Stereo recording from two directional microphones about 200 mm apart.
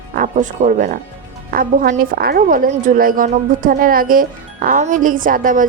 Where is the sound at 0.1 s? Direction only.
40° right (ahead or behind).